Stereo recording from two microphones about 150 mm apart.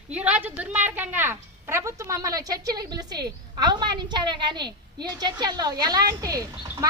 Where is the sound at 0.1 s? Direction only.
10° right (ahead or behind).